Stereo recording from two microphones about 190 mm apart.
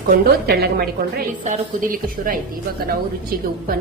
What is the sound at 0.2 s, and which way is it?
A woman's voice, 55° right (ahead or behind).